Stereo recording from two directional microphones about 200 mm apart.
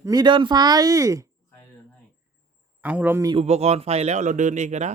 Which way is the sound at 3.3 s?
30° right (ahead or behind).